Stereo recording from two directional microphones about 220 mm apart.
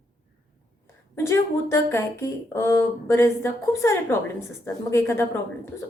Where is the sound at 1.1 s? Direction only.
10° left (ahead or behind).